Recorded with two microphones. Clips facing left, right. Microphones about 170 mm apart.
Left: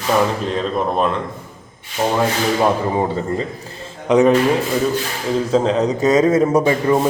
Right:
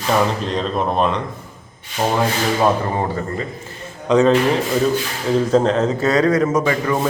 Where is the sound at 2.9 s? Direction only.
20° left (ahead or behind).